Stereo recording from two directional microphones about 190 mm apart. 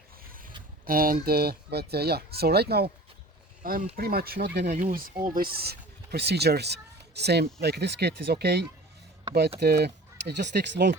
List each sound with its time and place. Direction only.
0.2 s zipper: 50° right (ahead or behind)
0.9 s speech: 50° right (ahead or behind)
4.7 s speech: 45° right (ahead or behind); by 10.9 s 65° right (ahead or behind)